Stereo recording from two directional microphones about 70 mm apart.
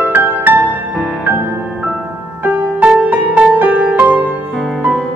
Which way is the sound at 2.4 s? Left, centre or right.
Right.